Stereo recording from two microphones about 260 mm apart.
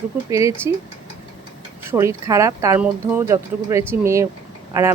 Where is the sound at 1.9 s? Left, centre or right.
Centre.